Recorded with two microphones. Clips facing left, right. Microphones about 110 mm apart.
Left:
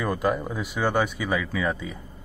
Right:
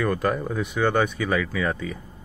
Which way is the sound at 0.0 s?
15° left (ahead or behind).